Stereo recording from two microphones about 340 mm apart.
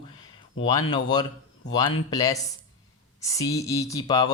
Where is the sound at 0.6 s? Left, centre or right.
Left.